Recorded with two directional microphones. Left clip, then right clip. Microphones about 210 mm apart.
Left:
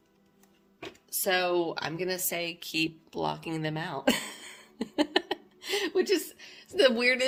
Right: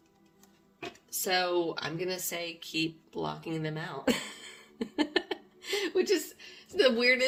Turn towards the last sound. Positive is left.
turn(degrees=50)  # may be behind; listen again after turning